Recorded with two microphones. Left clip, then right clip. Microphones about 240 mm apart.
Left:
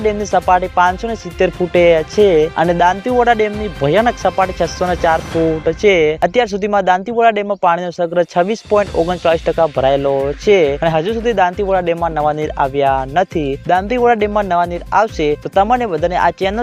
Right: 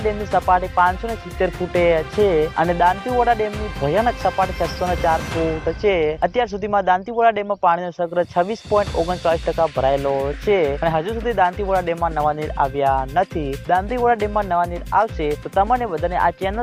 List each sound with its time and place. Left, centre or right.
0.0 s speech: left